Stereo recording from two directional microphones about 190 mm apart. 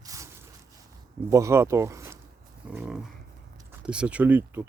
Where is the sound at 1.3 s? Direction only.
15° right (ahead or behind).